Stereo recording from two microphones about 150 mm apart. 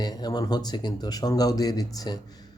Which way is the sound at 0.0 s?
25° left (ahead or behind).